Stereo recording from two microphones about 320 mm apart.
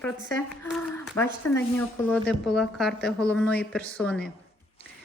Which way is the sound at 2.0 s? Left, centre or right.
Centre.